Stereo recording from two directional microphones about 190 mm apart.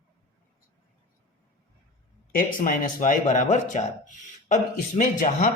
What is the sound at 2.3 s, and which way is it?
Speech, 45° left (ahead or behind).